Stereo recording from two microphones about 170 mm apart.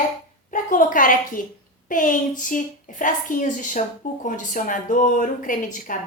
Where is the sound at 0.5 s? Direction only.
50° left (ahead or behind).